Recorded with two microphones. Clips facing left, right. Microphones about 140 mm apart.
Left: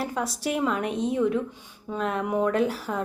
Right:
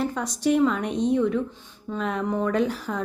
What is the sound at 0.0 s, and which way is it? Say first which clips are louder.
Speech: right 3 dB; 5° left (ahead or behind).